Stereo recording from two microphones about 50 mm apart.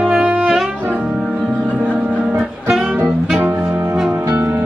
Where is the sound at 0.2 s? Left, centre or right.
Right.